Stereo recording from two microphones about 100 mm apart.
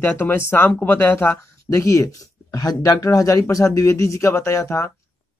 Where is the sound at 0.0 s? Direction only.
20° left (ahead or behind).